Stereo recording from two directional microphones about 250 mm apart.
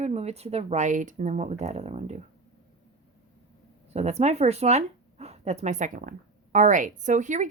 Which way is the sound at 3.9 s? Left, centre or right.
Right.